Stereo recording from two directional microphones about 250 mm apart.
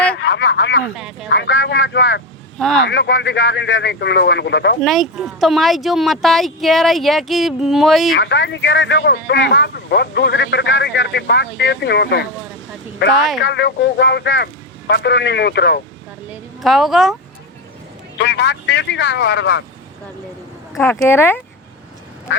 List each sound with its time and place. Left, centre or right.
0.1 s a sound: left
0.9 s speech: centre
1.3 s speech: left
2.6 s speech: centre
2.8 s speech: left
4.8 s speech: centre
8.2 s speech: left
13.4 s speech: left
16.3 s a woman's voice: centre
18.2 s speech: left
20.7 s speech: centre